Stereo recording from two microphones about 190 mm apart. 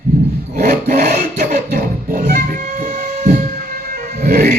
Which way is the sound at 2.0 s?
50° right (ahead or behind).